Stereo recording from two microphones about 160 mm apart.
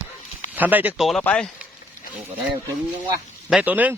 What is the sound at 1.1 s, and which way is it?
Speech, 5° left (ahead or behind).